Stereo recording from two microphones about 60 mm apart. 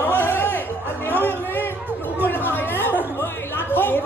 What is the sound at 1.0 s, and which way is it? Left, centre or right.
Chatter, left.